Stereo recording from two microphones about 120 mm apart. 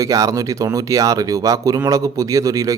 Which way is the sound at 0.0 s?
30° right (ahead or behind).